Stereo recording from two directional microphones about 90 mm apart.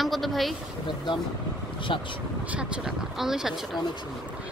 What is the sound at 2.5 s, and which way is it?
Speech, 10° right (ahead or behind).